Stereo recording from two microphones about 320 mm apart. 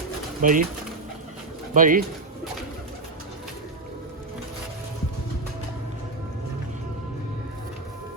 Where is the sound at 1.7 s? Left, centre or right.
Right.